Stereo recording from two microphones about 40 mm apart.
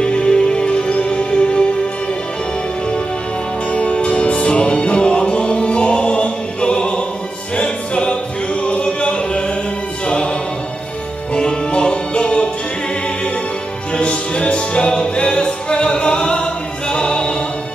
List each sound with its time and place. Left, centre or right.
0.0 s music: left
3.7 s music: left
11.3 s music: left
13.9 s music: left